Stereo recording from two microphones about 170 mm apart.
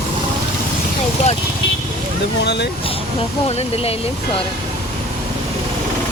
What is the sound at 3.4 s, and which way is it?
Speech, 35° left (ahead or behind).